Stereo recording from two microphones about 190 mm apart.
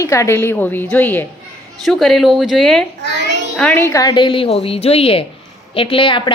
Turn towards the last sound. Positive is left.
turn(degrees=25)  # may be behind; listen again after turning